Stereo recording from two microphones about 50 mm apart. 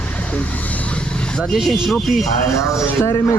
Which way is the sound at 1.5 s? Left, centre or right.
Centre.